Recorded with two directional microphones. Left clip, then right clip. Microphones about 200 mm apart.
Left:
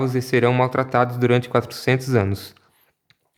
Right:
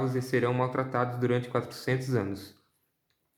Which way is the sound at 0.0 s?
35° left (ahead or behind).